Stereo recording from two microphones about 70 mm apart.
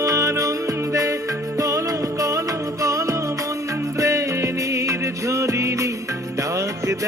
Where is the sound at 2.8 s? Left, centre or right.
Right.